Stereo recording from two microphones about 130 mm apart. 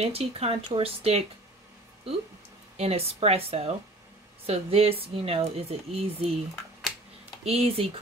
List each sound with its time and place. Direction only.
0.0 s speech: 50° right (ahead or behind)
2.8 s speech: 50° right (ahead or behind)
7.4 s speech: 50° right (ahead or behind)